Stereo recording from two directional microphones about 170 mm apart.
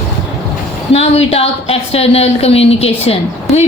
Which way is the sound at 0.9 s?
35° left (ahead or behind).